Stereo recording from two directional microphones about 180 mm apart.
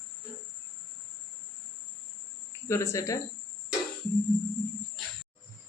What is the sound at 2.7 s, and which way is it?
Speech, 15° left (ahead or behind).